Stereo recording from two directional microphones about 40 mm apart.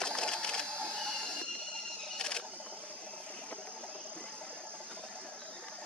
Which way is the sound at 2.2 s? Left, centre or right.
Centre.